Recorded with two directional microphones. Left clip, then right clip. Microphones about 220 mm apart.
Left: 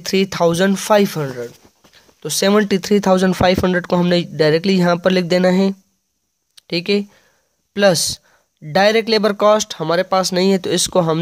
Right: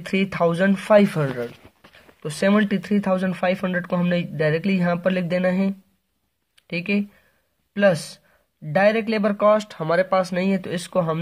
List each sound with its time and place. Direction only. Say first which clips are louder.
0.0 s speech: left 5 dB; 40° left (ahead or behind); by 1.6 s 25° left (ahead or behind)
2.0 s speech: left 6 dB; 40° left (ahead or behind)